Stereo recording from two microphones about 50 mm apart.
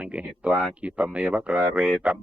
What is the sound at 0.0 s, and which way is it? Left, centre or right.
Speech, right.